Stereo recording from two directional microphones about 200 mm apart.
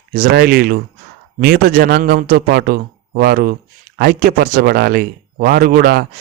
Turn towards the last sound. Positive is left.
turn(degrees=-50)  # may be behind; listen again after turning